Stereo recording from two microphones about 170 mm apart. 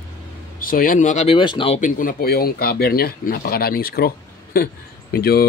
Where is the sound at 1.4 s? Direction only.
30° left (ahead or behind).